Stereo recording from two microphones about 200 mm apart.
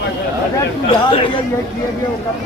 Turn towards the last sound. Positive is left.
turn(degrees=25)  # may be behind; listen again after turning